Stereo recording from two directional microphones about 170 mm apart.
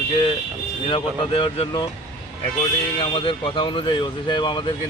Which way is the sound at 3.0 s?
30° left (ahead or behind).